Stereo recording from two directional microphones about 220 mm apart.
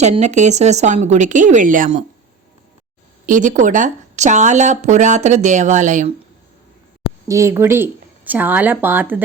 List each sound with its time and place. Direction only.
0.0 s speech: 30° right (ahead or behind)
3.2 s speech: 35° right (ahead or behind)
7.3 s speech: 15° right (ahead or behind)